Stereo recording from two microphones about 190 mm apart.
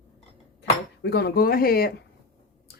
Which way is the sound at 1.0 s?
60° left (ahead or behind).